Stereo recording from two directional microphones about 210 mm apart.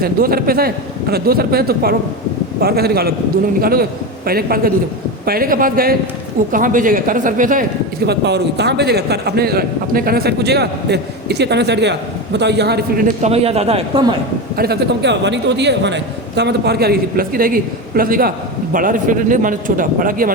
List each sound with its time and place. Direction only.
0.0 s a man's voice: 45° right (ahead or behind)
8.0 s a man's voice: 50° right (ahead or behind); by 14.2 s 25° right (ahead or behind)
14.5 s a man's voice: 50° right (ahead or behind)